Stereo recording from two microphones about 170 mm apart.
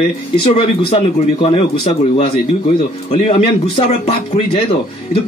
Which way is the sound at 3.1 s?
35° left (ahead or behind).